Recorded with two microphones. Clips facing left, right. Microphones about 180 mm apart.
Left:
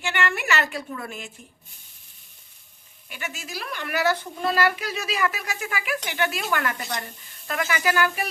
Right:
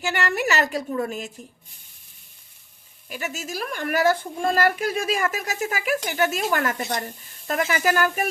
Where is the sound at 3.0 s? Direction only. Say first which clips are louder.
Right 5 dB; 40° right (ahead or behind).